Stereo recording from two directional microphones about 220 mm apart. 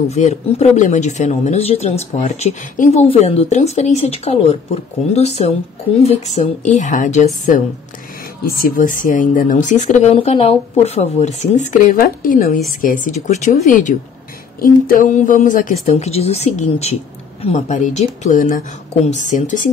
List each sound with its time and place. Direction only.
0.1 s speech: 30° left (ahead or behind)